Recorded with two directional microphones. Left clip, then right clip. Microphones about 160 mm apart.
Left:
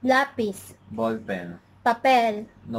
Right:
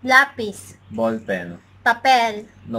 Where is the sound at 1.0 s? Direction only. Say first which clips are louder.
Right 5 dB; centre (ahead or behind).